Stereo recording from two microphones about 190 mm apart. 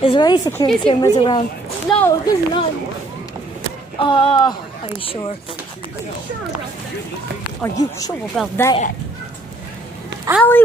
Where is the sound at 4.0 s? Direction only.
25° left (ahead or behind).